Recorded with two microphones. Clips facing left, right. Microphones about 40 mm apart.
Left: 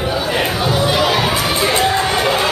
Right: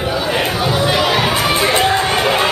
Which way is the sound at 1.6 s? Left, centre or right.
Centre.